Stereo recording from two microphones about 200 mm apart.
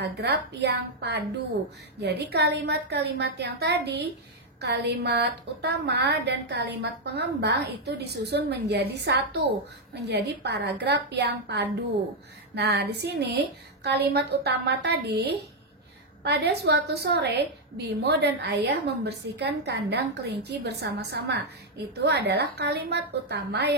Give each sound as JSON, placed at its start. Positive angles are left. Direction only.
{"t": 0.0, "sound": "a woman's voice", "side_deg": -55}